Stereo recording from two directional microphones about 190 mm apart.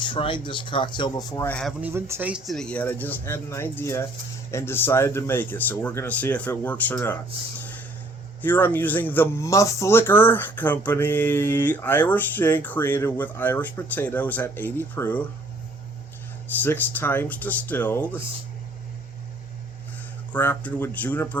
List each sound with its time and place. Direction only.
0.0 s speech: 25° left (ahead or behind)
1.5 s speech: 5° left (ahead or behind)
1.8 s speech: 15° right (ahead or behind); by 7.2 s 10° left (ahead or behind)
8.4 s speech: 10° left (ahead or behind)
16.6 s speech: 10° left (ahead or behind)
20.3 s speech: 10° left (ahead or behind)